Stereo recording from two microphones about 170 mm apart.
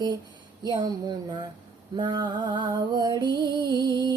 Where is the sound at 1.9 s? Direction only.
25° right (ahead or behind).